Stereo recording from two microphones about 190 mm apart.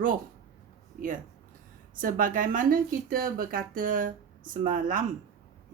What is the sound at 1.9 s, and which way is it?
Speech, 45° right (ahead or behind).